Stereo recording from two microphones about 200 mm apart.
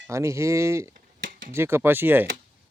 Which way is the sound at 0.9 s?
45° right (ahead or behind).